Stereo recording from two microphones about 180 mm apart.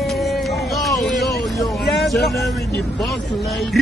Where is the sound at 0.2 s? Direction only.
Centre (ahead or behind).